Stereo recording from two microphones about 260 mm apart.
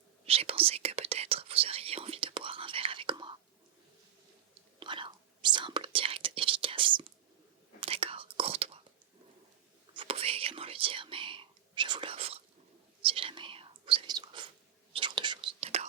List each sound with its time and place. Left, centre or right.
0.3 s whispering: right
4.8 s whispering: centre
9.9 s whispering: centre